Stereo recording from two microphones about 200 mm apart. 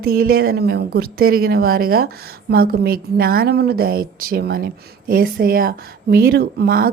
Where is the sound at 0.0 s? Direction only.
50° right (ahead or behind).